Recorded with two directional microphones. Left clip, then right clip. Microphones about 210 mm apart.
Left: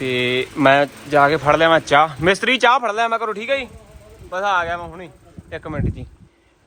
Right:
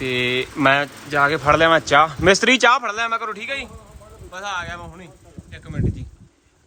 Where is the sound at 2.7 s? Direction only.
Centre (ahead or behind).